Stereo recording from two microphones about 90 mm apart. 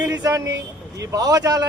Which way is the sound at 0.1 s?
40° right (ahead or behind).